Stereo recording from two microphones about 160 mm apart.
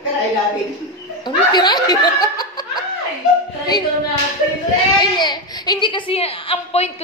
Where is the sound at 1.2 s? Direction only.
25° left (ahead or behind).